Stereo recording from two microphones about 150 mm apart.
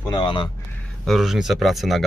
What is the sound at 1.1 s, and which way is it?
Speech, centre (ahead or behind).